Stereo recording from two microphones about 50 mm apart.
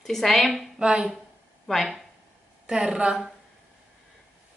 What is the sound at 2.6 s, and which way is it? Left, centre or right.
Speech, centre.